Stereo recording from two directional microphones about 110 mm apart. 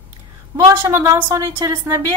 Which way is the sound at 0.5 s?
30° right (ahead or behind).